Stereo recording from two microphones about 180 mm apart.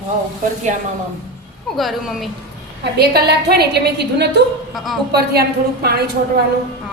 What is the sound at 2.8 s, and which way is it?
A woman's voice, 65° right (ahead or behind).